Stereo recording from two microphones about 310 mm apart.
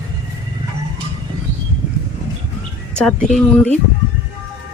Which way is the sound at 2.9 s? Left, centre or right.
Centre.